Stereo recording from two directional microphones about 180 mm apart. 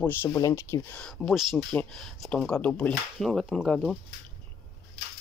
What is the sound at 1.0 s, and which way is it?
Speech, centre (ahead or behind).